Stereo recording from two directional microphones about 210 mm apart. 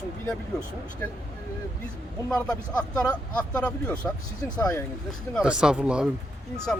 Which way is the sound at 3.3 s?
5° left (ahead or behind).